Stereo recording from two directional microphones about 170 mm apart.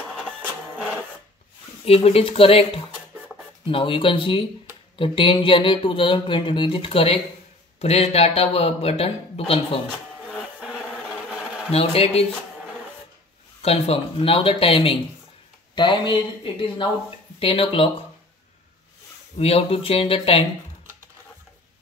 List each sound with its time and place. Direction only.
1.9 s speech: 35° left (ahead or behind)
10.3 s music: centre (ahead or behind)
11.2 s a sound: 5° right (ahead or behind)
11.7 s speech: 35° left (ahead or behind)
13.6 s speech: 35° left (ahead or behind)
19.3 s speech: 35° left (ahead or behind)